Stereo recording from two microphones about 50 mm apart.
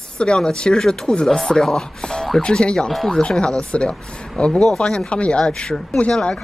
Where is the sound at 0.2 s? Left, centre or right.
Centre.